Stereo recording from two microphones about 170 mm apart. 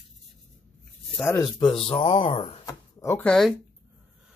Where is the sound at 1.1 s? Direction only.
15° left (ahead or behind).